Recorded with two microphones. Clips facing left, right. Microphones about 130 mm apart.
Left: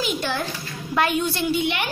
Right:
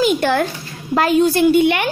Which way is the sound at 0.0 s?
60° right (ahead or behind).